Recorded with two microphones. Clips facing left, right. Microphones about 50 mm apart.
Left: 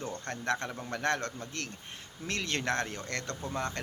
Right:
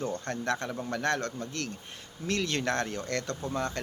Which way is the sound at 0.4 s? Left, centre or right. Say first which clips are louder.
Even; centre.